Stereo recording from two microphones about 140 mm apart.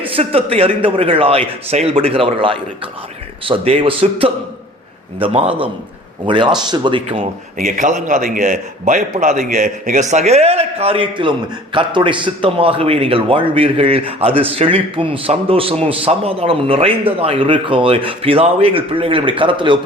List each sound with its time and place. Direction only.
0.0 s a man's voice: 45° right (ahead or behind)
7.6 s a man's voice: 70° right (ahead or behind); by 19.8 s 35° right (ahead or behind)